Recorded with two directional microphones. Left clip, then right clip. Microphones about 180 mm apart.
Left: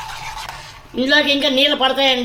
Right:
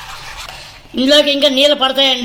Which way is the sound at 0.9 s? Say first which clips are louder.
Right 4 dB; 45° right (ahead or behind).